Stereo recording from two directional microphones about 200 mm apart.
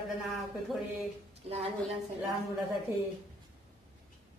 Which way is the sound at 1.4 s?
30° right (ahead or behind).